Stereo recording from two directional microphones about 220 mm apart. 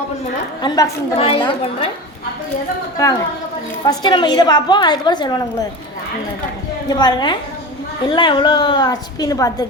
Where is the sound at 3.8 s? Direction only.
20° left (ahead or behind).